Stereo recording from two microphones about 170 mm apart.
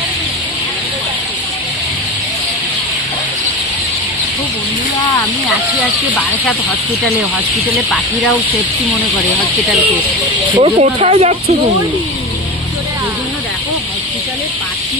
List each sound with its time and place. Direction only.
10.6 s speech: 35° right (ahead or behind)